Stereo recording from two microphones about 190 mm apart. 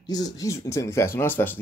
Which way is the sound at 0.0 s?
20° left (ahead or behind).